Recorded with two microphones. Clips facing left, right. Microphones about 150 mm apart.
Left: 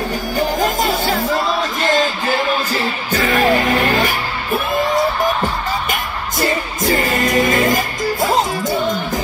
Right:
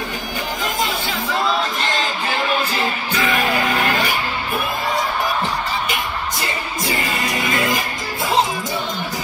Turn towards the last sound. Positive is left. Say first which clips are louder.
# left 6 dB
turn(degrees=45)  # may be behind; listen again after turning